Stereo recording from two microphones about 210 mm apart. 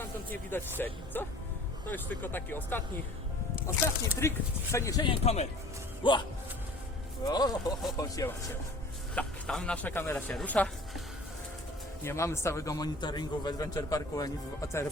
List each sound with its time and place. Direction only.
0.0 s a man's voice: 10° left (ahead or behind)
5.2 s a man's voice: 30° left (ahead or behind)
7.3 s a man's voice: 20° left (ahead or behind)
9.1 s a man's voice: 5° left (ahead or behind)
12.0 s a man's voice: 15° left (ahead or behind)